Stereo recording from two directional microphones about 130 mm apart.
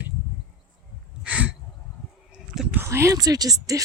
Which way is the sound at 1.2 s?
10° right (ahead or behind).